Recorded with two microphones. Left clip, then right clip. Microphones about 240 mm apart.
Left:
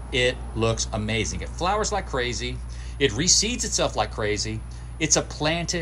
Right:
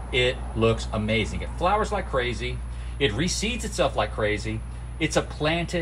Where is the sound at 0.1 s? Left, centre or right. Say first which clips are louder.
Left 1 dB; left.